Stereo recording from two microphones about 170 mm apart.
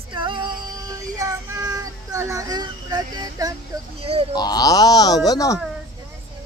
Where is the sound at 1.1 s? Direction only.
20° right (ahead or behind).